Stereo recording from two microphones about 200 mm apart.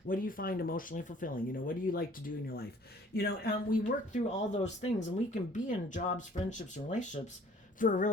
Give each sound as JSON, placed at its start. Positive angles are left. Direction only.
{"t": 0.1, "sound": "speech", "side_deg": 45}
{"t": 7.8, "sound": "speech", "side_deg": 40}